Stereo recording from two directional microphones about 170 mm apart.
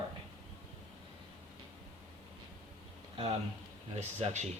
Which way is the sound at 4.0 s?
40° right (ahead or behind).